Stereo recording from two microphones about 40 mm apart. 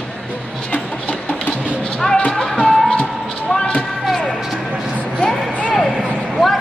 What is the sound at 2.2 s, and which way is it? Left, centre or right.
Music, centre.